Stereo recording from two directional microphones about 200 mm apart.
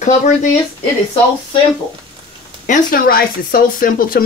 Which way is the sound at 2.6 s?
45° left (ahead or behind).